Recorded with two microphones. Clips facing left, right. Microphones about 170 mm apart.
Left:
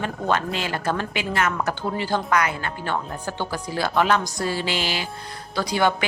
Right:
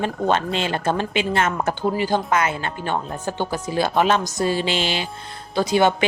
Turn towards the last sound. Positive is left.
turn(degrees=-20)  # may be behind; listen again after turning